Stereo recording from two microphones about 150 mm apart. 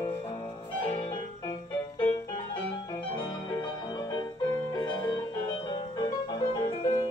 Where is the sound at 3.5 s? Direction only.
30° left (ahead or behind).